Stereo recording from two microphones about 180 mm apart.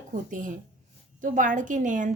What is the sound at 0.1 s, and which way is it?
A woman's voice, 45° right (ahead or behind).